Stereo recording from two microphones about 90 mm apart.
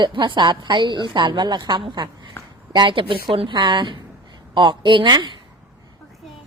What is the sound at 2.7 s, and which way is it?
A woman's voice, 60° right (ahead or behind).